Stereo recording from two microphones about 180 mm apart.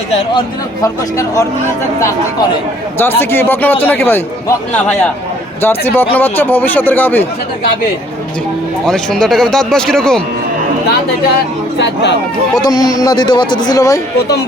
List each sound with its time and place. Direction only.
0.8 s a man's voice: 15° left (ahead or behind)
3.0 s a man's voice: 10° left (ahead or behind)
8.9 s speech: 5° left (ahead or behind)
12.6 s a man's voice: 20° left (ahead or behind)